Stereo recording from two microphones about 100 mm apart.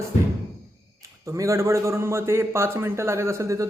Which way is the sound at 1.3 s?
30° right (ahead or behind).